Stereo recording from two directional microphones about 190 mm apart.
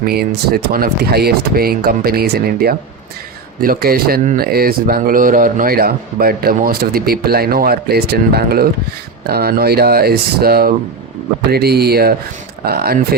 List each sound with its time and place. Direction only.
0.0 s speech: 55° right (ahead or behind)